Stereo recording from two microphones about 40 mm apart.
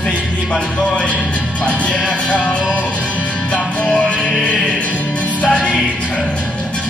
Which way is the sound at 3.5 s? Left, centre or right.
Left.